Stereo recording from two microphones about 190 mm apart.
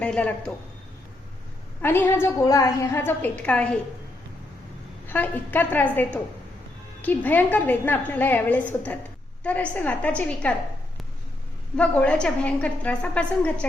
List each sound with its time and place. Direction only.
0.0 s a woman's voice: 5° left (ahead or behind)
1.8 s a woman's voice: 10° left (ahead or behind)
5.0 s a woman's voice: 10° left (ahead or behind)
11.8 s a woman's voice: 5° left (ahead or behind)